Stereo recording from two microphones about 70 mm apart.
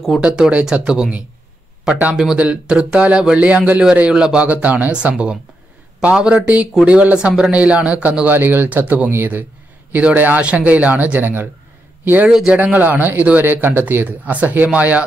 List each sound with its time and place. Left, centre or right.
0.2 s speech: centre
12.3 s speech: centre
12.5 s speech: right